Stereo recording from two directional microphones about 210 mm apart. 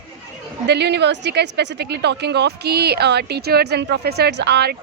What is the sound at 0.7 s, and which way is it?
Speech, 55° right (ahead or behind).